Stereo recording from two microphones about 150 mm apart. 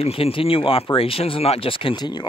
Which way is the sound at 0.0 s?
40° left (ahead or behind).